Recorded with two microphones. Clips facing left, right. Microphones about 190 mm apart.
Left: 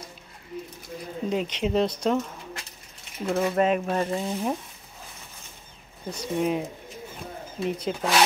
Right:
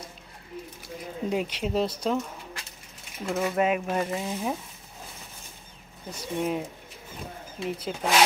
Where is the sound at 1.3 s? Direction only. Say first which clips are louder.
Left 3 dB; 10° right (ahead or behind).